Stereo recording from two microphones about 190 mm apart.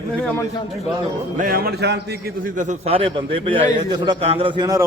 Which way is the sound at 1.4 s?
50° right (ahead or behind).